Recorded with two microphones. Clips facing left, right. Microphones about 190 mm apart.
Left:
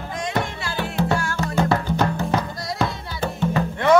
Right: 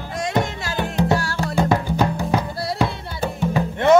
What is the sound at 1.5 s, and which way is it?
Music, 15° right (ahead or behind).